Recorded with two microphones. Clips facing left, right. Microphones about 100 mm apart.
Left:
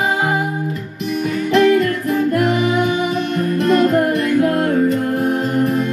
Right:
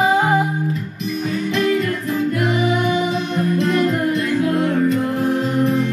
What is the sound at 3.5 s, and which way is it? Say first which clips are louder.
Music: left 6 dB; 60° left (ahead or behind).